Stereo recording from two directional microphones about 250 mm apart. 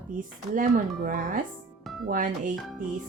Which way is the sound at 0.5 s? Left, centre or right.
Right.